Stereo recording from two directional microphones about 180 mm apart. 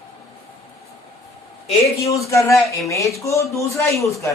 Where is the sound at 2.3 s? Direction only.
15° left (ahead or behind).